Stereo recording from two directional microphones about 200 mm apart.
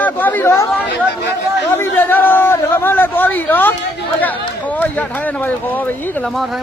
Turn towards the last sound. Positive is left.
turn(degrees=10)  # may be behind; listen again after turning